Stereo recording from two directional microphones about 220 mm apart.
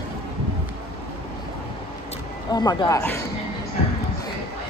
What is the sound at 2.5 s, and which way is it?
Speech, 20° left (ahead or behind).